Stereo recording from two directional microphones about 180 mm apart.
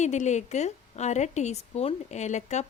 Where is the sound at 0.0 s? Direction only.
40° left (ahead or behind).